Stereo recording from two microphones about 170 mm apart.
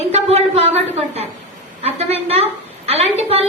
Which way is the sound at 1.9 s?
35° right (ahead or behind).